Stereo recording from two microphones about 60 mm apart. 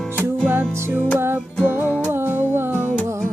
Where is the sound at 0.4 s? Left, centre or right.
Right.